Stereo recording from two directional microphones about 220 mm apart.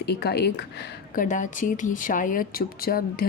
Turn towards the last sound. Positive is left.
turn(degrees=40)  # may be behind; listen again after turning